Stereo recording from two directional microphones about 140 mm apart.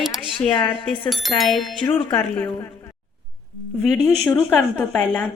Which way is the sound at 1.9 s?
15° left (ahead or behind).